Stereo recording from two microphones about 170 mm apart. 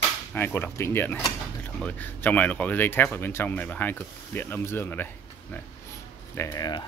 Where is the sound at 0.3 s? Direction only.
15° left (ahead or behind).